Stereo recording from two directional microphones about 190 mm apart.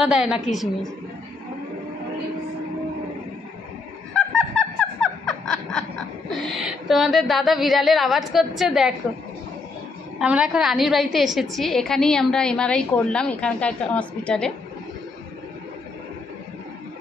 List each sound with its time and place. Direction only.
0.0 s a woman's voice: 5° right (ahead or behind)
4.1 s a sound: 5° left (ahead or behind)
5.5 s snicker: 5° left (ahead or behind)
6.3 s a woman's voice: centre (ahead or behind)
10.1 s a woman's voice: 5° right (ahead or behind)